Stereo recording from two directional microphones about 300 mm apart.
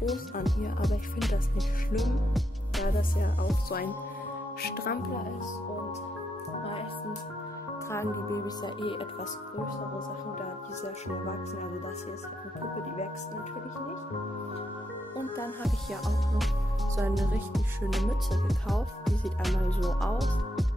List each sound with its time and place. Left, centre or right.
0.0 s music: centre
2.9 s music: left
4.6 s speech: left
7.9 s speech: centre
15.1 s music: centre